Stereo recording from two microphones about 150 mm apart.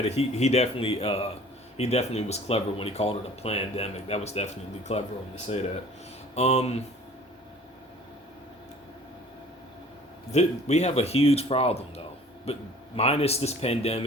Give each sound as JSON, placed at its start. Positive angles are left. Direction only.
{"t": 0.0, "sound": "speech", "side_deg": 45}
{"t": 10.3, "sound": "speech", "side_deg": 50}